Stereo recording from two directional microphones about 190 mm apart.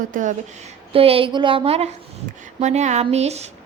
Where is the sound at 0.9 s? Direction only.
30° right (ahead or behind).